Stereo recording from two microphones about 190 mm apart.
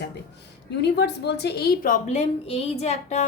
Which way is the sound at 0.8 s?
60° left (ahead or behind).